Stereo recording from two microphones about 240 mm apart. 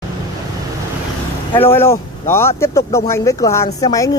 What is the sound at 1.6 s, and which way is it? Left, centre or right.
Speech, centre.